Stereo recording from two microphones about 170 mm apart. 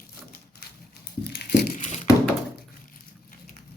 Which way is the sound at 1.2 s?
75° left (ahead or behind).